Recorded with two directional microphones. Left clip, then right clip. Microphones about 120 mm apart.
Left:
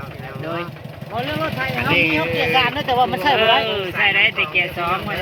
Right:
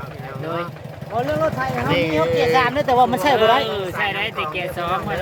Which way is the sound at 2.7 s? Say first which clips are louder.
Right 2 dB; 40° right (ahead or behind).